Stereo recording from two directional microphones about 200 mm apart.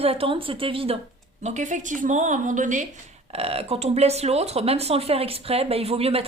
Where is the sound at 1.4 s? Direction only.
35° right (ahead or behind).